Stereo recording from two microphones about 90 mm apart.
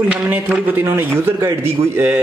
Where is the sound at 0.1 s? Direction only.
20° right (ahead or behind).